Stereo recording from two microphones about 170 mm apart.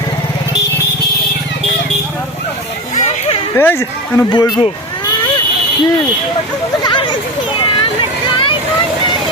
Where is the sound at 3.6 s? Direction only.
10° left (ahead or behind).